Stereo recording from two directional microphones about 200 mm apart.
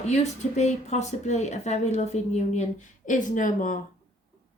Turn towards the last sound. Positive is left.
turn(degrees=40)  # may be behind; listen again after turning